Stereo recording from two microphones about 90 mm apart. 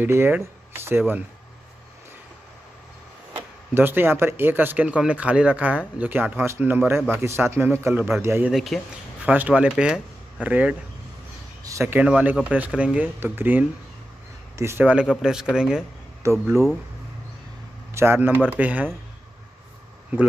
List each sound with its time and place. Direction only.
0.0 s speech: 25° right (ahead or behind)
3.7 s speech: 25° right (ahead or behind)
8.5 s speech: centre (ahead or behind)
9.2 s speech: 15° right (ahead or behind)
11.6 s a sound: 35° right (ahead or behind)
12.0 s speech: 15° right (ahead or behind); by 14.9 s 30° right (ahead or behind)
14.9 s speech: 10° right (ahead or behind)
16.2 s speech: 30° right (ahead or behind)
17.9 s speech: 25° right (ahead or behind)